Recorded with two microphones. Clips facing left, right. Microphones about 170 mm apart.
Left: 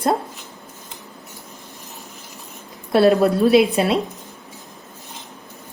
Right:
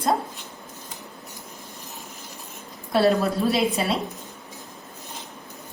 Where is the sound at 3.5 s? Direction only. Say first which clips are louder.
Left 8 dB; 70° left (ahead or behind).